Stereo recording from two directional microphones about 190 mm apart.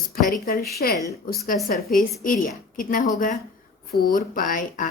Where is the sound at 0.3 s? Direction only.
50° left (ahead or behind).